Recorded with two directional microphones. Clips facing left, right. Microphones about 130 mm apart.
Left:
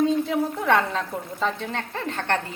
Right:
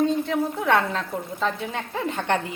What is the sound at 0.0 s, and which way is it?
A woman's voice, centre (ahead or behind).